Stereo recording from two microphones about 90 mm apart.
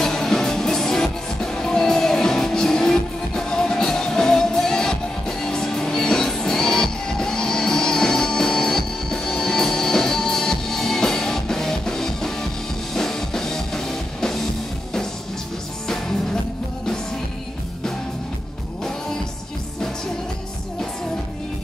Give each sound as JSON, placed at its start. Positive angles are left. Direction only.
{"t": 0.0, "sound": "music", "side_deg": 5}